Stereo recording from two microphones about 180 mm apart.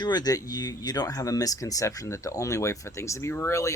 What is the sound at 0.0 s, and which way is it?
Speech, 25° left (ahead or behind).